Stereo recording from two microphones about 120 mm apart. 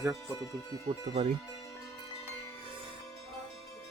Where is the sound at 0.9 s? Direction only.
85° right.